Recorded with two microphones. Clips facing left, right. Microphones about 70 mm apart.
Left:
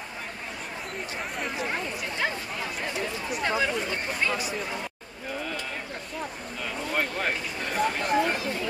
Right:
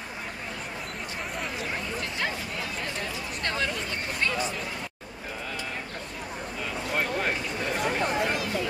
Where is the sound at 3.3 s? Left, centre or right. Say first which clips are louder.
Left 4 dB; centre.